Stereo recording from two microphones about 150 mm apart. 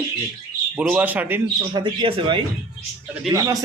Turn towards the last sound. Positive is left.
turn(degrees=-20)  # may be behind; listen again after turning